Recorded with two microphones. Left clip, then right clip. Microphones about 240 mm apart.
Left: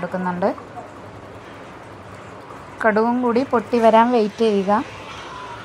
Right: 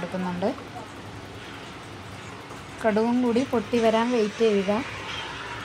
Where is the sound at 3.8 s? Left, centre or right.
Left.